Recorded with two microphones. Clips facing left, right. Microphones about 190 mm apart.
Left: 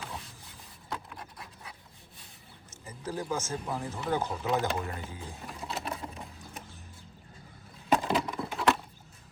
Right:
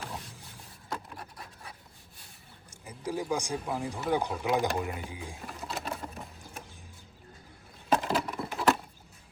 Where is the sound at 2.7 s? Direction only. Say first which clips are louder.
Right 2 dB; 10° right (ahead or behind).